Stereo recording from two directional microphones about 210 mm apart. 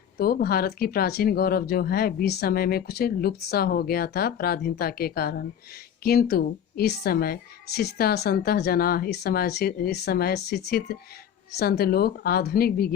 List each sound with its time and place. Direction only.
0.2 s speech: 45° left (ahead or behind)